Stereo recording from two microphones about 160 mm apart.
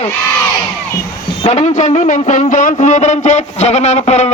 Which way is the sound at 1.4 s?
45° left (ahead or behind).